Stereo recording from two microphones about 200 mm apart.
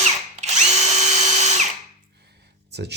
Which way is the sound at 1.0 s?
35° right (ahead or behind).